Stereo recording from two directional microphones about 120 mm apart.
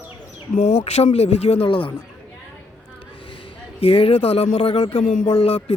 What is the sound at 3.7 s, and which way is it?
Speech, 55° left (ahead or behind).